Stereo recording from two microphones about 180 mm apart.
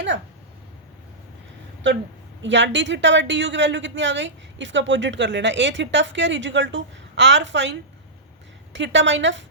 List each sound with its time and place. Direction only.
2.4 s a woman's voice: 85° right